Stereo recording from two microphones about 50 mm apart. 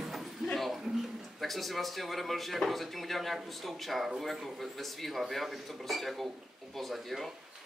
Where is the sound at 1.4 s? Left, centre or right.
Centre.